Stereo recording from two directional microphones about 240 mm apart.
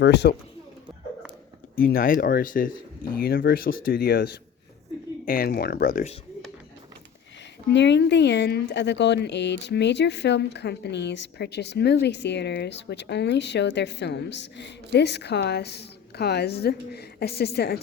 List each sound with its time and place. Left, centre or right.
0.0 s a woman's voice: left
1.7 s speech: left
7.7 s a woman's voice: left